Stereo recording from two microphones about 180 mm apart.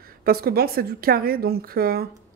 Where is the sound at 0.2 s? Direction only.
55° right (ahead or behind).